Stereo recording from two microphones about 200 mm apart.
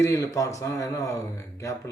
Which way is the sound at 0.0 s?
15° left (ahead or behind).